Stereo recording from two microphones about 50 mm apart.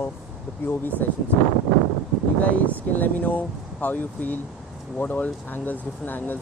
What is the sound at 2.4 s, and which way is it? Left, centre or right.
Speech, left.